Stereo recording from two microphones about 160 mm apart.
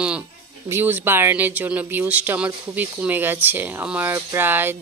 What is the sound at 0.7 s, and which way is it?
Speech, 10° right (ahead or behind).